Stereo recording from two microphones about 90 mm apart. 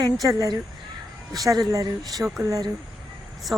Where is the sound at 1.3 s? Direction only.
45° right (ahead or behind).